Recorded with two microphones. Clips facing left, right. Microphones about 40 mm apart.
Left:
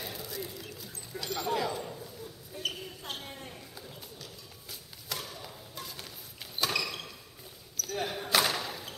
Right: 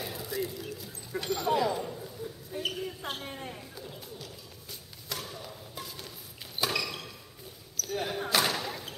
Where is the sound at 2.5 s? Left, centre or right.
Right.